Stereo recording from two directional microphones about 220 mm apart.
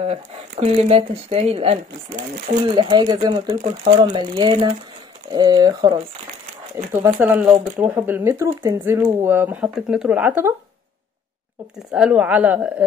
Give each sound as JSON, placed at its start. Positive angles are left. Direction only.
{"t": 0.0, "sound": "speech", "side_deg": -25}
{"t": 11.9, "sound": "speech", "side_deg": -5}